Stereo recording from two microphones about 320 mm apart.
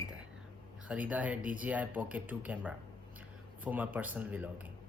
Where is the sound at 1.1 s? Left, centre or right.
Centre.